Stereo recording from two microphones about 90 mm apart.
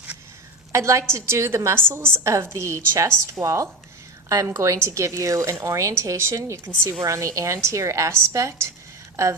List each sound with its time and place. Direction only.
0.7 s a woman's voice: 35° right (ahead or behind)